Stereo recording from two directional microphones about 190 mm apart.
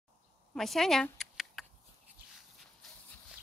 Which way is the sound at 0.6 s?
Centre (ahead or behind).